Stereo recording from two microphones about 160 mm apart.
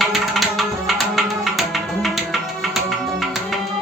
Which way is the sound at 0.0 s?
Centre (ahead or behind).